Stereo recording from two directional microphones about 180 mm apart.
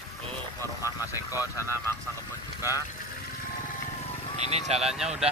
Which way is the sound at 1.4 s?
15° left (ahead or behind).